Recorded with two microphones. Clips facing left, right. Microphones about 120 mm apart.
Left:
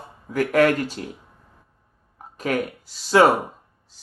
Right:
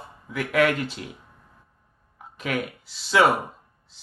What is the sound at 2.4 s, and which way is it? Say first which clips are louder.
Speech: left 4 dB; 40° left (ahead or behind).